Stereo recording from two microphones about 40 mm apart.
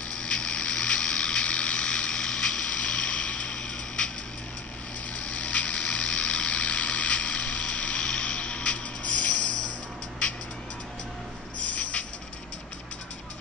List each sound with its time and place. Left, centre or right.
0.0 s a sound: left
5.1 s vehicle: left
11.6 s train: left